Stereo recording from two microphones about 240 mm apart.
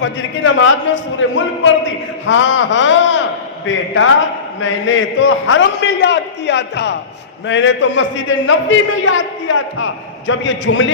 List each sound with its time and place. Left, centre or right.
0.0 s a man's voice: left